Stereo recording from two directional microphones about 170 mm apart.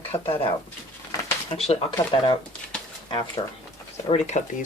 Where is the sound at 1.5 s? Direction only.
35° left (ahead or behind).